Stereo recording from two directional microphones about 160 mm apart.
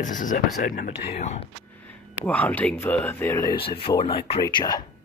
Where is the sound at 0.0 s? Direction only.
55° left (ahead or behind).